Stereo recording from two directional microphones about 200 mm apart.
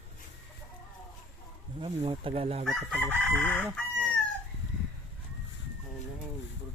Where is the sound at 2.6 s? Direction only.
Centre (ahead or behind).